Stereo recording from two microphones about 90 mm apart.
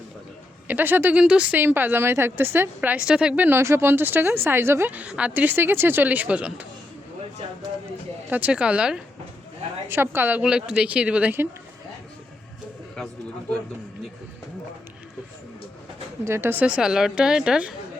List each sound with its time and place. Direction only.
0.7 s a woman's voice: 20° right (ahead or behind)
1.2 s a woman's voice: 10° right (ahead or behind)
1.5 s a woman's voice: 20° right (ahead or behind)
3.6 s a woman's voice: 30° right (ahead or behind)
8.3 s a woman's voice: 15° right (ahead or behind)
9.9 s a woman's voice: 25° right (ahead or behind)
10.4 s a woman's voice: 10° right (ahead or behind)
16.2 s a woman's voice: 25° right (ahead or behind)
16.6 s a woman's voice: 10° right (ahead or behind)